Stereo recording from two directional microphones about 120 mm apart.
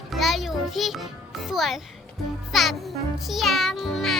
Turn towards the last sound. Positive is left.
turn(degrees=0)  # may be behind; listen again after turning